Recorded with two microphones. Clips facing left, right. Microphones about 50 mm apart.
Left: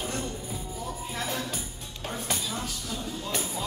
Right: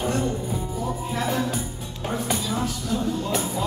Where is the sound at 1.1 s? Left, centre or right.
Centre.